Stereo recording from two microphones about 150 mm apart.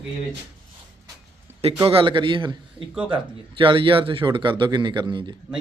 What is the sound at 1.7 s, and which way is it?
Speech, 35° right (ahead or behind).